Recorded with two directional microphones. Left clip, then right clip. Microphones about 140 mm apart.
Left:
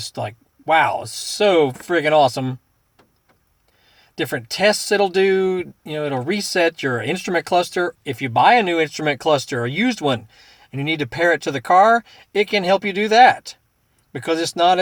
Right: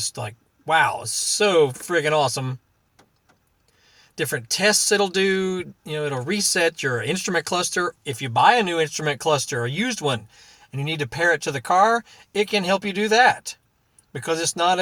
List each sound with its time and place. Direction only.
0.0 s speech: 20° left (ahead or behind)
4.1 s speech: 20° left (ahead or behind)